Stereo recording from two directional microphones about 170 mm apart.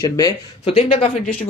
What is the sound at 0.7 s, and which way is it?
Speech, 35° left (ahead or behind).